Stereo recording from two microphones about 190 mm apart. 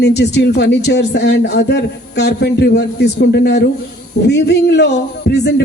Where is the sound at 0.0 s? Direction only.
65° left (ahead or behind).